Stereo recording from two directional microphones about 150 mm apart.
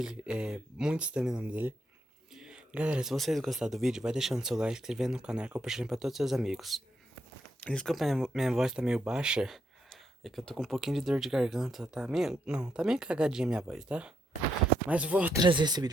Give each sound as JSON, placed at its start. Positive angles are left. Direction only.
{"t": 0.0, "sound": "speech", "side_deg": -5}
{"t": 15.4, "sound": "speech", "side_deg": -30}